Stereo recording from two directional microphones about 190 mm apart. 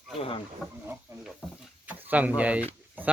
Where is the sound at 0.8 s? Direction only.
10° right (ahead or behind).